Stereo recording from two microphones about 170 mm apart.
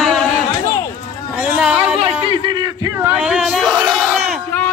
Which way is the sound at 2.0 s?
35° right (ahead or behind).